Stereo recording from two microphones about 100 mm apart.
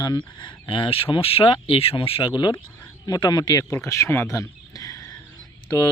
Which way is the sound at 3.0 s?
40° left (ahead or behind).